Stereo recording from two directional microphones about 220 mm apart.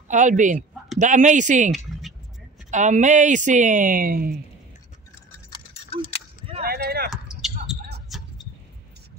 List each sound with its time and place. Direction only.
0.1 s speech: 35° right (ahead or behind)
2.7 s speech: 35° right (ahead or behind)
5.5 s clock: 20° left (ahead or behind)
6.6 s clip-clop: 45° right (ahead or behind)
7.1 s basketball bounce: centre (ahead or behind)
8.1 s a sound: centre (ahead or behind)